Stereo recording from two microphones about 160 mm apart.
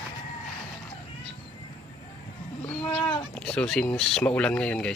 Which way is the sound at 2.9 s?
30° left (ahead or behind).